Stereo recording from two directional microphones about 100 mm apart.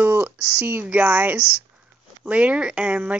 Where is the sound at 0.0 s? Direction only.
20° right (ahead or behind).